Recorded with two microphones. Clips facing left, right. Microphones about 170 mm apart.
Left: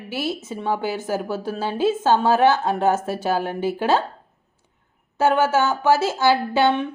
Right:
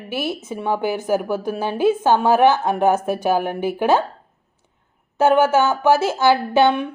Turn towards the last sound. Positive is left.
turn(degrees=-15)  # may be behind; listen again after turning